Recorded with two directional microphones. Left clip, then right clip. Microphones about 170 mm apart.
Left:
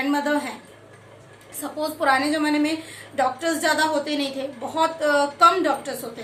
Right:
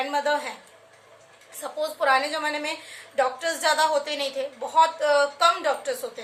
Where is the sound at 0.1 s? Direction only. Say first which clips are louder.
Left 1 dB; 20° right (ahead or behind).